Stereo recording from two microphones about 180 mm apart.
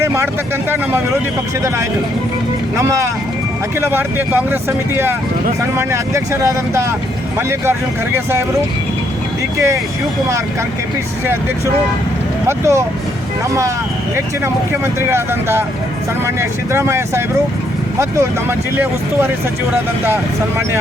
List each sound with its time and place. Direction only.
0.0 s speech: 15° right (ahead or behind)
2.7 s speech: 15° right (ahead or behind)
5.7 s speech: 15° right (ahead or behind)
12.5 s speech: 15° right (ahead or behind)
14.4 s speech: 15° right (ahead or behind)